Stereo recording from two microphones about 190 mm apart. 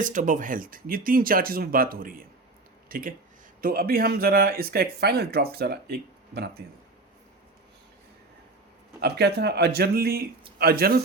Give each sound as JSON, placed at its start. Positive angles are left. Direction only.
{"t": 0.0, "sound": "speech", "side_deg": -45}
{"t": 9.0, "sound": "speech", "side_deg": -55}